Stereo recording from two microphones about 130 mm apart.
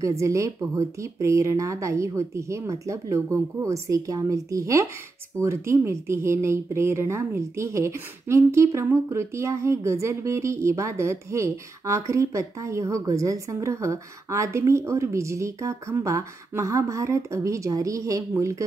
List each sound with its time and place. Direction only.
0.0 s a woman's voice: 25° right (ahead or behind)